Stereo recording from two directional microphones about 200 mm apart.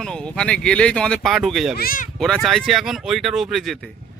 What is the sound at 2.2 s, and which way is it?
Speech, centre (ahead or behind).